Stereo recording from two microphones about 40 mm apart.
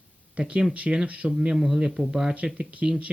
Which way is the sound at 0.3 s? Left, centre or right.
Right.